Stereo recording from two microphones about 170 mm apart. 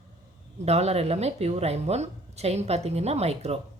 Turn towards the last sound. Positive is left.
turn(degrees=-35)  # may be behind; listen again after turning